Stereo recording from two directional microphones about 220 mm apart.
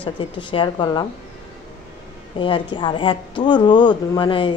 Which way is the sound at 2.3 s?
20° left (ahead or behind).